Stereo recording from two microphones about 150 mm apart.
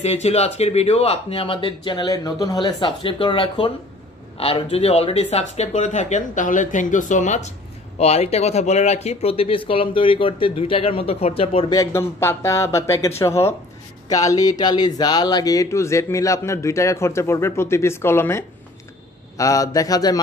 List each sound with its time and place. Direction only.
0.0 s speech: 45° left (ahead or behind)
11.7 s speech: 20° left (ahead or behind)